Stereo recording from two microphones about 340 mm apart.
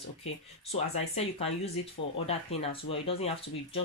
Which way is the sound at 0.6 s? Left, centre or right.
Centre.